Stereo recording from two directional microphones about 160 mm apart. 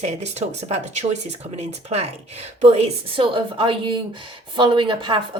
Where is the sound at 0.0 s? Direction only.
45° right (ahead or behind).